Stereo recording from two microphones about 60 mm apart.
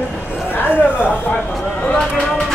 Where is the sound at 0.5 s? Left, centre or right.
Left.